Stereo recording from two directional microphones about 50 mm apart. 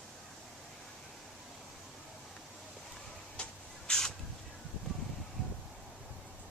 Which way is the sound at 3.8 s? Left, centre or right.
Centre.